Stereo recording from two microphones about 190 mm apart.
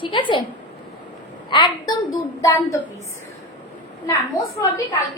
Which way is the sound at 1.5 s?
20° left (ahead or behind).